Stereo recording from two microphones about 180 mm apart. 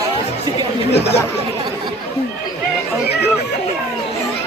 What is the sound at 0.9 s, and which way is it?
Speech, 70° left (ahead or behind).